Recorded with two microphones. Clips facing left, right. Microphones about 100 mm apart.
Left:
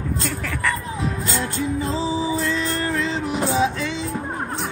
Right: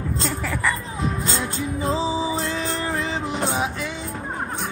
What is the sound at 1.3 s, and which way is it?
Music, 20° right (ahead or behind).